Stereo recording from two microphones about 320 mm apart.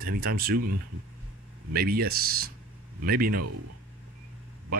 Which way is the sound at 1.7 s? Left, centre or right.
Right.